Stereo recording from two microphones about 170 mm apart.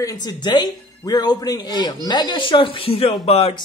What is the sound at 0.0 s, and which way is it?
Speech, 20° left (ahead or behind).